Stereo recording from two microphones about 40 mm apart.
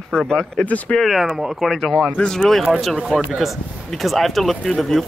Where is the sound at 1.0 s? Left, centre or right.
Centre.